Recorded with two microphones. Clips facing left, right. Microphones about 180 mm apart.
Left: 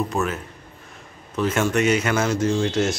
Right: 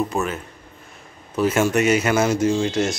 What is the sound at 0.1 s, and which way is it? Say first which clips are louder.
Speech: even; centre (ahead or behind).